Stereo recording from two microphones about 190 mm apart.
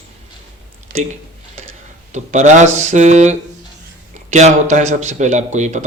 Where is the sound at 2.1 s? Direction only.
40° right (ahead or behind).